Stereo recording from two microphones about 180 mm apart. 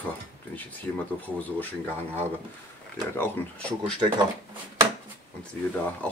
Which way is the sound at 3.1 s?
10° left (ahead or behind).